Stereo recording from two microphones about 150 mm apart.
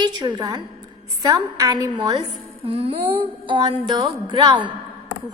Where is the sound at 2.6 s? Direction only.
40° right (ahead or behind).